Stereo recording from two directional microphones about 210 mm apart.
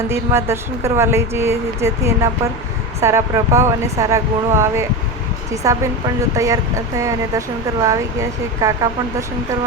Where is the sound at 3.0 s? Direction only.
15° right (ahead or behind).